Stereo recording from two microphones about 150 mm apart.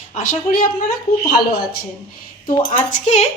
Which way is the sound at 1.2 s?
90° left.